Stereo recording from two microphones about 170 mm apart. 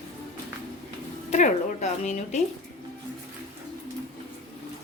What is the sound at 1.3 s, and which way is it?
A woman's voice, 45° left (ahead or behind).